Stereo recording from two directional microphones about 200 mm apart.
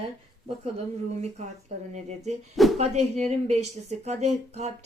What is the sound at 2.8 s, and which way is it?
Speech, 35° right (ahead or behind).